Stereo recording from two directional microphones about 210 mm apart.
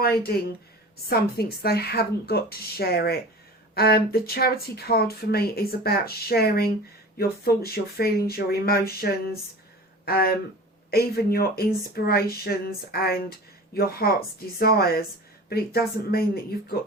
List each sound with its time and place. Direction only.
0.0 s speech: 50° left (ahead or behind)